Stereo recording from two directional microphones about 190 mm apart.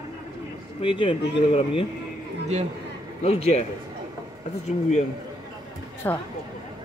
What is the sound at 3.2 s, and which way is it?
Speech, 35° left (ahead or behind).